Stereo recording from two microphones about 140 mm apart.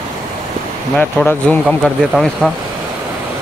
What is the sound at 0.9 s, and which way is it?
Speech, 5° left (ahead or behind).